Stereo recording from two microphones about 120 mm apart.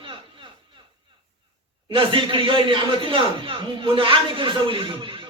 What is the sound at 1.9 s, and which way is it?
A man's voice, 45° right (ahead or behind).